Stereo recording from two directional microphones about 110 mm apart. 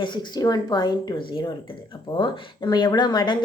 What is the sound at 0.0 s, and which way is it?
A woman's voice, 45° left (ahead or behind).